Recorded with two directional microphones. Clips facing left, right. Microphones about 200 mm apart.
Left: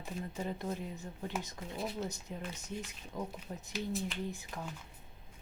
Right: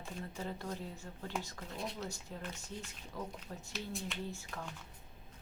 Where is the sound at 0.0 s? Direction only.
20° left (ahead or behind).